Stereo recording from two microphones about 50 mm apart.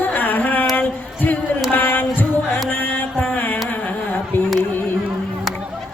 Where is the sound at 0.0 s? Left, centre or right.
Left.